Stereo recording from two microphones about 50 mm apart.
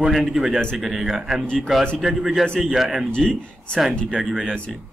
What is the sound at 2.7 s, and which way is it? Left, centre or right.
Speech, centre.